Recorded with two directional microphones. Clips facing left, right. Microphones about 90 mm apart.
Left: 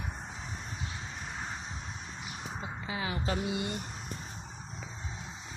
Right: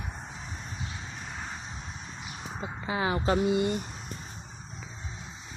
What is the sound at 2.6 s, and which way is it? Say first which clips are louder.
Speech: right 7 dB; 40° right (ahead or behind).